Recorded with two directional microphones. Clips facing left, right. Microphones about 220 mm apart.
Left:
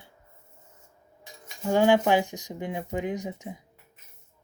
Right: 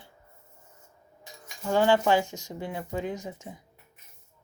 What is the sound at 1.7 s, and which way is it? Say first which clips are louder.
Speech: left 2 dB; 15° left (ahead or behind).